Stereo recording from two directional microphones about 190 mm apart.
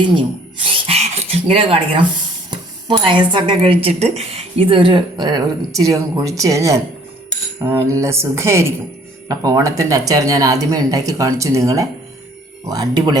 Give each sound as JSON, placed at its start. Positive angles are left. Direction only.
{"t": 0.6, "sound": "rub", "side_deg": -30}
{"t": 2.5, "sound": "speech", "side_deg": -25}